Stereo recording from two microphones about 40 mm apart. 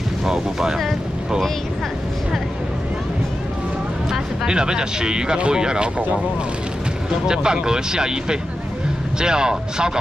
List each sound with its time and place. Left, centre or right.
0.2 s speech: centre
4.1 s speech: centre
7.2 s speech: centre